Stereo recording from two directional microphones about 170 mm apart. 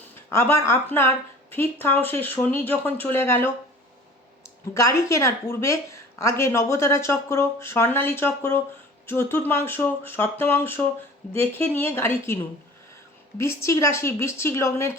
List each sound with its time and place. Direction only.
0.3 s a woman's voice: 15° left (ahead or behind)
4.7 s a woman's voice: 15° left (ahead or behind)
13.4 s a woman's voice: 15° left (ahead or behind)